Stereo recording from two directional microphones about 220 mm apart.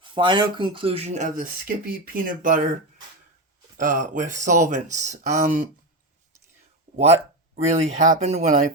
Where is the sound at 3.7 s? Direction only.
35° right (ahead or behind).